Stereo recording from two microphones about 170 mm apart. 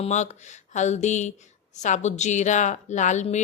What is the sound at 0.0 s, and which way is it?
Speech, 40° left (ahead or behind).